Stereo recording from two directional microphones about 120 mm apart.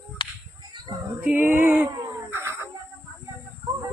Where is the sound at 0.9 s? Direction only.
40° right (ahead or behind).